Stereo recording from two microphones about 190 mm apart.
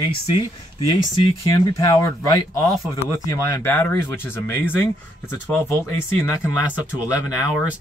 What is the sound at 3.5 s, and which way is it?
Speech, 10° left (ahead or behind).